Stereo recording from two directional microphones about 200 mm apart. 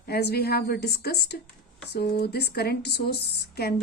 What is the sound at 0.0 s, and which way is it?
Speech, 55° left (ahead or behind).